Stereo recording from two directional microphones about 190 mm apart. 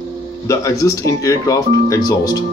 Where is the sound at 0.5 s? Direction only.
15° left (ahead or behind).